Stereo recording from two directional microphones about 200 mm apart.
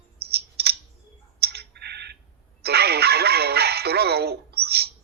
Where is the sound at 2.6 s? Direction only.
55° right (ahead or behind).